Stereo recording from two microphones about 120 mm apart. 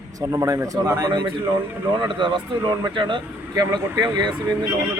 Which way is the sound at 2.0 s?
45° right (ahead or behind).